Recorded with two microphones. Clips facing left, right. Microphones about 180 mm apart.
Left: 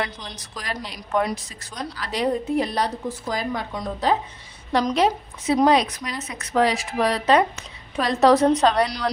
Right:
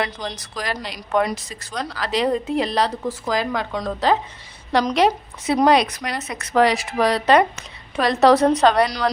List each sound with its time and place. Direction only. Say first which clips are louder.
0.0 s a woman's voice: right 4 dB; 90° right
4.7 s a woman's voice: right 2 dB; 75° right (ahead or behind)